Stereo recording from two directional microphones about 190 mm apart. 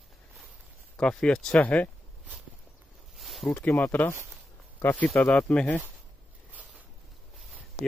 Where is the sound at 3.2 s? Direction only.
Centre (ahead or behind).